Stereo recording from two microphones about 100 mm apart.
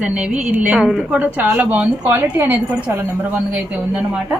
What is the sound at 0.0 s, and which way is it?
A woman's voice, 10° right (ahead or behind).